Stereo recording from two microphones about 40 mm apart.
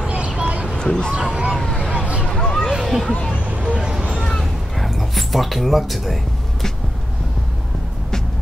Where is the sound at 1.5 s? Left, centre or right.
Centre.